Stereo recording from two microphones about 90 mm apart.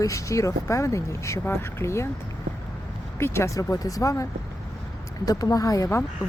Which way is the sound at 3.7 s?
40° left (ahead or behind).